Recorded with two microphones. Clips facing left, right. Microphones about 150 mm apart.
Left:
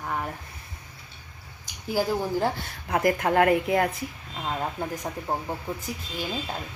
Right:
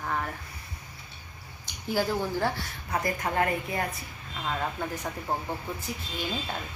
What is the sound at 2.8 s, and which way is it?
A woman's voice, 60° left (ahead or behind).